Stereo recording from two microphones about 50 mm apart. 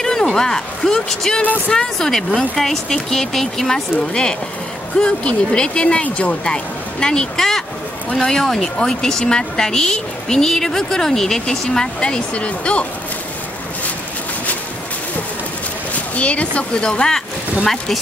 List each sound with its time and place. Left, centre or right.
0.0 s a woman's voice: centre
16.2 s speech: left